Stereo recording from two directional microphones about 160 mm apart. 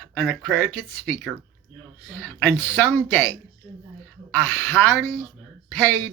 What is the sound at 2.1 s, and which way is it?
A man's voice, 10° left (ahead or behind).